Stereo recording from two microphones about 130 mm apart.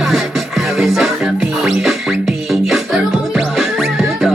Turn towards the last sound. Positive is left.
turn(degrees=-5)  # may be behind; listen again after turning